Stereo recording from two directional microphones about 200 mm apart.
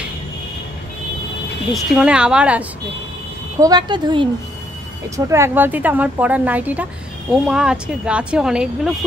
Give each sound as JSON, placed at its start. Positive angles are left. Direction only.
{"t": 1.7, "sound": "speech", "side_deg": -5}
{"t": 3.5, "sound": "a woman's voice", "side_deg": -20}